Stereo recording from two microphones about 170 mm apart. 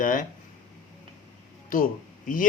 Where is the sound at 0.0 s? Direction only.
50° left (ahead or behind).